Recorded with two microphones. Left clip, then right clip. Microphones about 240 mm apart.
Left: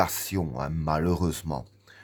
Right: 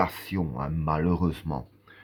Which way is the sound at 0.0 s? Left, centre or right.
Left.